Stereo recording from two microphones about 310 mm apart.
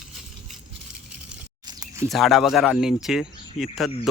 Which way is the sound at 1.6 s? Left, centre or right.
Centre.